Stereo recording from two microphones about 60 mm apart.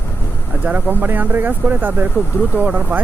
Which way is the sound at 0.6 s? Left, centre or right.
Right.